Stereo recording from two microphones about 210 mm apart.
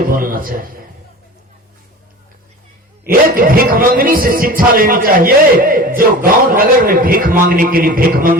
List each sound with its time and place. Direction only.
0.1 s a man's voice: 40° right (ahead or behind)
3.0 s a man's voice: 45° right (ahead or behind)